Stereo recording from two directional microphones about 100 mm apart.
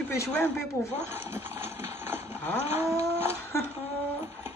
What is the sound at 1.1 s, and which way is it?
Horse, 20° right (ahead or behind).